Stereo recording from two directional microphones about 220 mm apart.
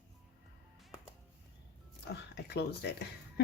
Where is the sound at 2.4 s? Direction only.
50° left (ahead or behind).